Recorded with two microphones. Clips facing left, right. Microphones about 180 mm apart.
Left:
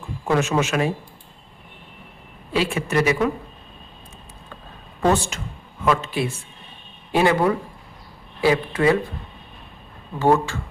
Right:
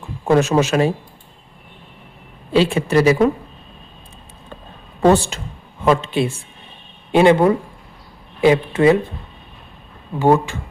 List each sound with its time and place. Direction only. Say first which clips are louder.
0.3 s speech: right 6 dB; 35° right (ahead or behind)
2.5 s speech: right 7 dB; 30° right (ahead or behind)
5.0 s speech: right 6 dB; 35° right (ahead or behind)
10.2 s speech: right 3 dB; 15° right (ahead or behind)